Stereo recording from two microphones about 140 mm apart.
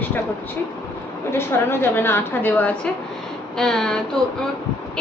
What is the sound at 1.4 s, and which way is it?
A woman's voice, 15° left (ahead or behind).